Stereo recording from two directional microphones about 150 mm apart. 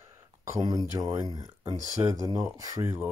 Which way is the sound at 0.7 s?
25° right (ahead or behind).